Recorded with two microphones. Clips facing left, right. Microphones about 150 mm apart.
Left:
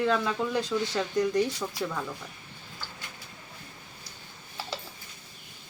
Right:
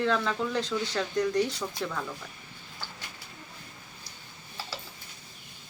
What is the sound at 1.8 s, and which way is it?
Speech, 10° left (ahead or behind).